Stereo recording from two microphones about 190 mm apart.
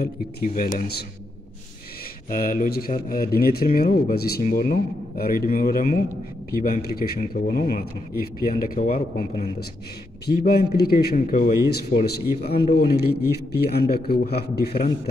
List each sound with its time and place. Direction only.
0.0 s speech: 50° left (ahead or behind)
2.2 s speech: 45° left (ahead or behind)
10.2 s a man's voice: 55° left (ahead or behind)
12.7 s a man's voice: 55° left (ahead or behind)